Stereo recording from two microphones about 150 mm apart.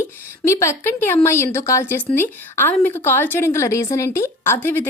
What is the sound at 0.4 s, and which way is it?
A woman's voice, 20° left (ahead or behind).